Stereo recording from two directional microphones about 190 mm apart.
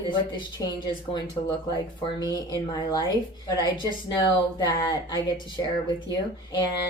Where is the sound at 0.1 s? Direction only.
25° left (ahead or behind).